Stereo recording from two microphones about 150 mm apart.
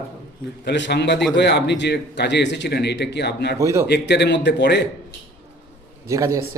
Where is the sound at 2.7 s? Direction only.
90° left.